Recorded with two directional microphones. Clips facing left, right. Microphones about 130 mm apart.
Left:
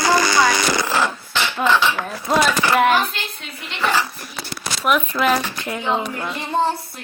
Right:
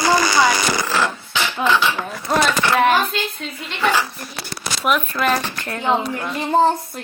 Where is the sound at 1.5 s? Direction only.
Centre (ahead or behind).